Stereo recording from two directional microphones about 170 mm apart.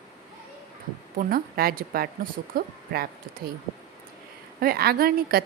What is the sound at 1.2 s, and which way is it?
Speech, 60° right (ahead or behind).